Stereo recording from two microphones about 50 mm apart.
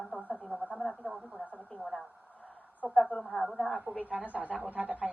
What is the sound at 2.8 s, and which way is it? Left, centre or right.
Speech, centre.